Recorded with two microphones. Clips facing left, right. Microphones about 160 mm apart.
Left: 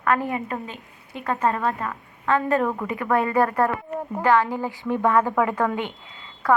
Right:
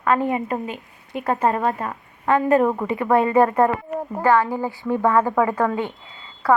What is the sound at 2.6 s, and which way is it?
Speech, 20° right (ahead or behind).